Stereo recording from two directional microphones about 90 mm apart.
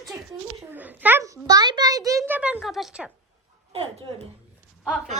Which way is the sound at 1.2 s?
45° right (ahead or behind).